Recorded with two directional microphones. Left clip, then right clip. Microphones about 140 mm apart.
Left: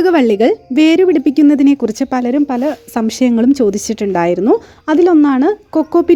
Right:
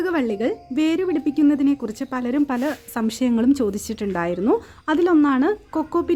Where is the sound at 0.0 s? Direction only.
45° left (ahead or behind).